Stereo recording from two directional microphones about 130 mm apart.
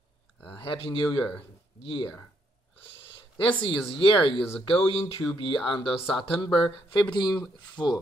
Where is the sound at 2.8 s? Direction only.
45° left (ahead or behind).